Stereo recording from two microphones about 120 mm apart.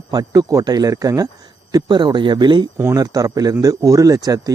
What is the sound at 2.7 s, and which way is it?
A man's voice, 25° right (ahead or behind).